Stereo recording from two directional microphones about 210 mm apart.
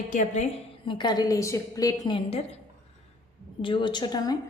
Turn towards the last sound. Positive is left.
turn(degrees=20)  # may be behind; listen again after turning